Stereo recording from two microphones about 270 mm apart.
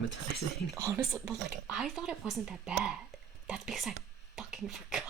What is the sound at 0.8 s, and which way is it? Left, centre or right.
Speech, centre.